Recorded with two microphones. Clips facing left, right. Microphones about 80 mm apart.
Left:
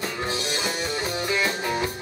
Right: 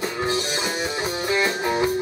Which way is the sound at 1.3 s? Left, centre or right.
Centre.